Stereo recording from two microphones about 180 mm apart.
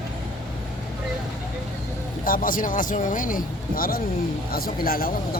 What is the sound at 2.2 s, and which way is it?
Speech, 50° left (ahead or behind).